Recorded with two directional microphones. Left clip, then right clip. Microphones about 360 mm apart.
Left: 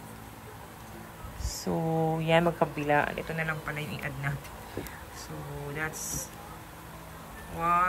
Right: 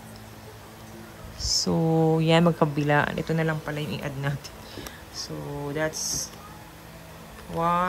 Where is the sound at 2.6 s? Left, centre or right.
Left.